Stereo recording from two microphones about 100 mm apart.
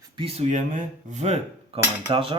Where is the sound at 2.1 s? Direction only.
60° right (ahead or behind).